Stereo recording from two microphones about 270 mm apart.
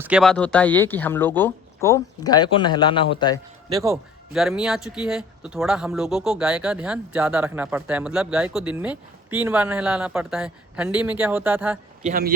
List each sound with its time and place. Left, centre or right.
0.0 s speech: centre
3.7 s a man's voice: centre
4.3 s speech: centre
12.0 s speech: right